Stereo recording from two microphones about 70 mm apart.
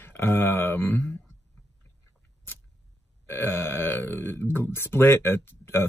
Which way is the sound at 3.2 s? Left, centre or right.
Left.